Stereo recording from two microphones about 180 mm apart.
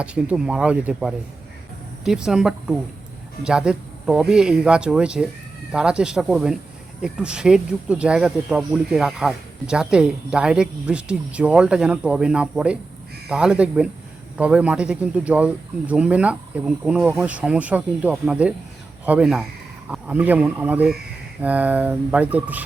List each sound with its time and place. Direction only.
0.0 s speech: 5° right (ahead or behind)